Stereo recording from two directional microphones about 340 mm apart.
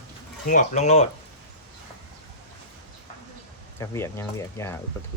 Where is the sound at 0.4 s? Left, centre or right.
Left.